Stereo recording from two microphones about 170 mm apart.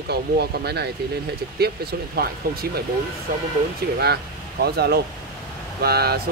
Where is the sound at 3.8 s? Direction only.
65° right (ahead or behind).